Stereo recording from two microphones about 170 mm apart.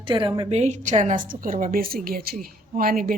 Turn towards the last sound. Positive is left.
turn(degrees=-55)  # may be behind; listen again after turning